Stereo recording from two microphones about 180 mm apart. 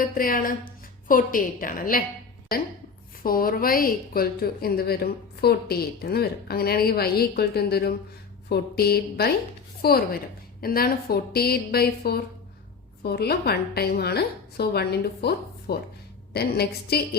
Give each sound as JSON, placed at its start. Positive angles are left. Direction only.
{"t": 0.0, "sound": "a woman's voice", "side_deg": 50}
{"t": 3.2, "sound": "a woman's voice", "side_deg": 55}